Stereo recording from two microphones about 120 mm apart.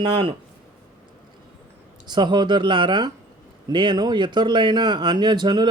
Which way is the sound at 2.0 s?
40° right (ahead or behind).